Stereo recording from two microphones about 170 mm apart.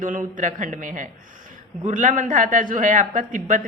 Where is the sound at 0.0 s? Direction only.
50° right (ahead or behind).